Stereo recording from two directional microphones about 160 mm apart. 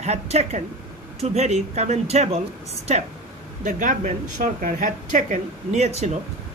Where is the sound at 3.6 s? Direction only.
55° right (ahead or behind).